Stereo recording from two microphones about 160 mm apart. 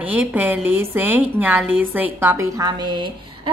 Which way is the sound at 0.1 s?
10° right (ahead or behind).